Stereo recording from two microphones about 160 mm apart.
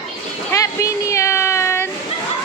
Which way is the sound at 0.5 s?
20° left (ahead or behind).